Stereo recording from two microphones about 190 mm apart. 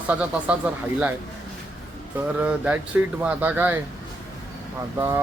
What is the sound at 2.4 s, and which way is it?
Speech, 5° right (ahead or behind).